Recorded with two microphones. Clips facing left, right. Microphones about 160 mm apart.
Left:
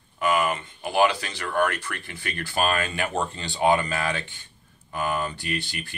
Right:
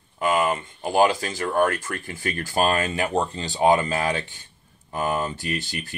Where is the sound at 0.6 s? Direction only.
45° right (ahead or behind).